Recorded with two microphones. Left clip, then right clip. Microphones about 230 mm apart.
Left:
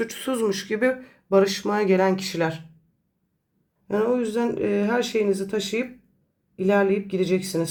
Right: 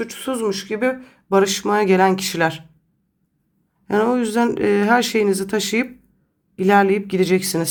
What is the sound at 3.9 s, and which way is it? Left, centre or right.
Speech, right.